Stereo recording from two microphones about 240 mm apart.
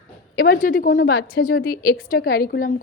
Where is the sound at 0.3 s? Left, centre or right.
Left.